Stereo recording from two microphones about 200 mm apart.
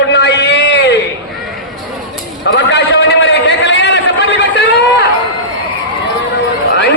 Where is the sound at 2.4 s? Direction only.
65° left (ahead or behind).